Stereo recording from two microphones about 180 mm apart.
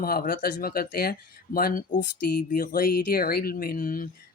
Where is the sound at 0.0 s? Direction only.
55° left (ahead or behind).